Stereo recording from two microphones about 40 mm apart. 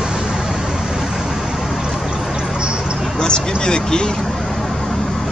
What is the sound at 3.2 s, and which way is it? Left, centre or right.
Speech, left.